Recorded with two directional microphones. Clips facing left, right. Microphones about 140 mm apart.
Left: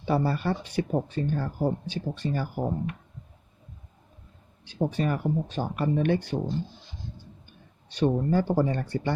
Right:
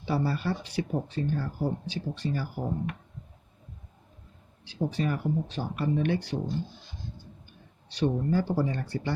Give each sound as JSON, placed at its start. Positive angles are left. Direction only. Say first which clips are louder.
{"t": 0.0, "sound": "speech", "louder": "left 3 dB", "side_deg": 50}
{"t": 4.6, "sound": "speech", "louder": "left 2 dB", "side_deg": 55}
{"t": 7.9, "sound": "speech", "louder": "left 3 dB", "side_deg": 55}